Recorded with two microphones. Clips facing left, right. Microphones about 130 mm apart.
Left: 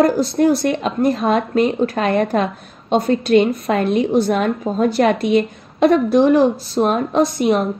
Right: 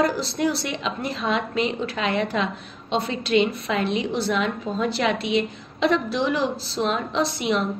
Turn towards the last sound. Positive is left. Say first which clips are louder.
# left 7 dB
turn(degrees=45)  # may be behind; listen again after turning